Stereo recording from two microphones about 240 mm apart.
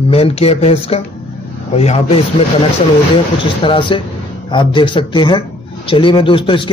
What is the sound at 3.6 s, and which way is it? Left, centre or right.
A man's voice, left.